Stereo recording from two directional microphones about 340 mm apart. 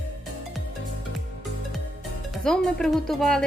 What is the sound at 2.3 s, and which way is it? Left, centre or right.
Speech, centre.